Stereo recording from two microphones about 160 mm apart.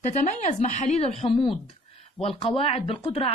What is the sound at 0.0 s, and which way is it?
A woman's voice, 45° left (ahead or behind).